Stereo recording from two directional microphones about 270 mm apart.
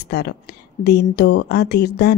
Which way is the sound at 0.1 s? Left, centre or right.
Left.